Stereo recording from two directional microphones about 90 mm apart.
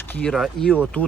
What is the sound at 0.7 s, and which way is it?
Speech, 15° left (ahead or behind).